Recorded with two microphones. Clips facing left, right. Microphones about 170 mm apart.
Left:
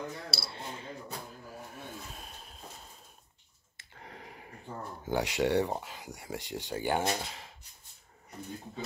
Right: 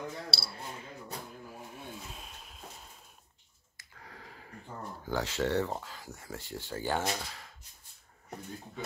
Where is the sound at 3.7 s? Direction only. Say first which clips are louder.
Left 3 dB; 25° left (ahead or behind).